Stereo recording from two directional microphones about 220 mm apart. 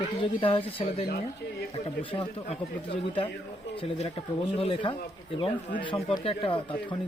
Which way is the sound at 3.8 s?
30° left (ahead or behind).